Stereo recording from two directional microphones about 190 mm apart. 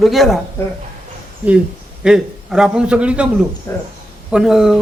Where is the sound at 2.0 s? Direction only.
5° right (ahead or behind).